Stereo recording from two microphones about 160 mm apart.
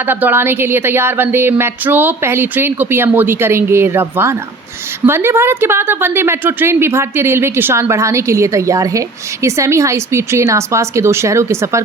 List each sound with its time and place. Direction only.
0.0 s a woman's voice: 15° right (ahead or behind)